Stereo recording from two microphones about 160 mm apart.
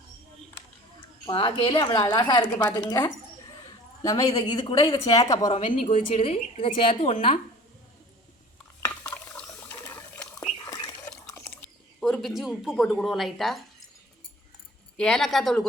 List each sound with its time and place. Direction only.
1.3 s speech: 30° left (ahead or behind)
5.5 s a woman's voice: 50° left (ahead or behind)
5.9 s a woman's voice: 40° left (ahead or behind)
9.1 s water: 5° left (ahead or behind)
10.7 s liquid: 25° left (ahead or behind)
11.9 s speech: centre (ahead or behind)
14.9 s speech: 5° left (ahead or behind)